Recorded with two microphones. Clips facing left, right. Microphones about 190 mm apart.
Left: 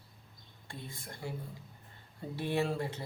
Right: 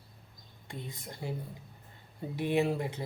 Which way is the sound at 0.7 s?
20° right (ahead or behind).